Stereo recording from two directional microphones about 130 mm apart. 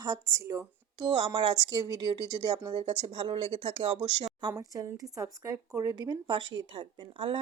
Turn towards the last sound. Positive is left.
turn(degrees=-40)  # may be behind; listen again after turning